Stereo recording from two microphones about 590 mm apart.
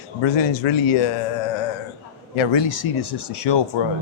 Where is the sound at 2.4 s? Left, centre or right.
Left.